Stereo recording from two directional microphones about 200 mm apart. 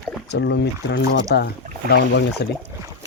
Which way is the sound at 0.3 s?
60° left (ahead or behind).